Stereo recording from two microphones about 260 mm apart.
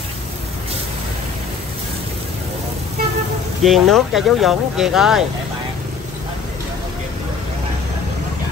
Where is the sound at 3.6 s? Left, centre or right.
Centre.